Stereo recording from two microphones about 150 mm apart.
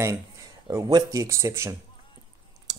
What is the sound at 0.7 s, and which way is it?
Speech, 25° right (ahead or behind).